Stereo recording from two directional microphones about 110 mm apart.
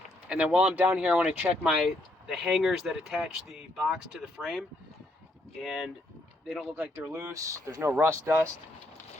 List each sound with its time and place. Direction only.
0.3 s speech: 10° right (ahead or behind)
5.6 s speech: centre (ahead or behind)
6.7 s speech: 20° right (ahead or behind)